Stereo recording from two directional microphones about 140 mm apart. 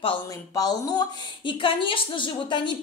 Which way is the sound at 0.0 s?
30° left (ahead or behind).